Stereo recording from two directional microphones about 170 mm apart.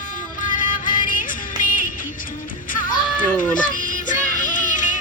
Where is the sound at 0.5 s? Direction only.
50° left (ahead or behind).